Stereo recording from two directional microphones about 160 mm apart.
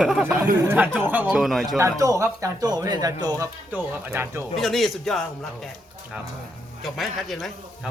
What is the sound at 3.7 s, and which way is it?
Speech, 10° right (ahead or behind).